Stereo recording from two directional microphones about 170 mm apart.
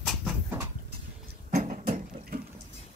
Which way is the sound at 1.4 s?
40° right (ahead or behind).